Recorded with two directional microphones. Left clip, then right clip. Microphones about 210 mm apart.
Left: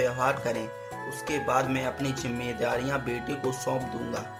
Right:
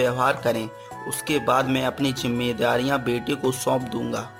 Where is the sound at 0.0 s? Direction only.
40° right (ahead or behind).